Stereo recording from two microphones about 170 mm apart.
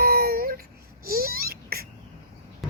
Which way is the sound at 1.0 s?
60° right (ahead or behind).